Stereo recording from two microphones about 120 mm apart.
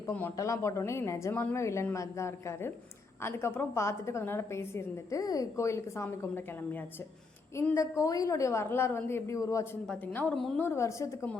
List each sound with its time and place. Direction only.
0.1 s a woman's voice: 20° left (ahead or behind)
9.8 s a woman's voice: 10° left (ahead or behind)